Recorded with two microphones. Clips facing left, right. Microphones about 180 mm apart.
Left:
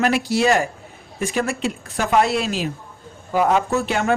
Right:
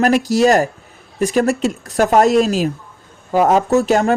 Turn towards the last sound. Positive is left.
turn(degrees=-40)  # may be behind; listen again after turning